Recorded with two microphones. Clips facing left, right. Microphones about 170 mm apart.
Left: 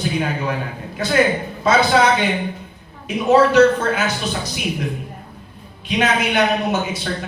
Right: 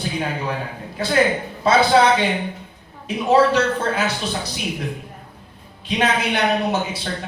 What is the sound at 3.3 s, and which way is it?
A man's voice, 30° right (ahead or behind).